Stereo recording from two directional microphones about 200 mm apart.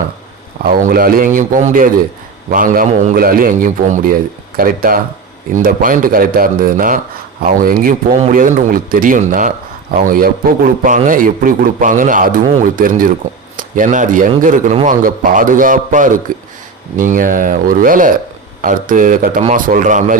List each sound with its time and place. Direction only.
0.6 s a man's voice: 45° right (ahead or behind)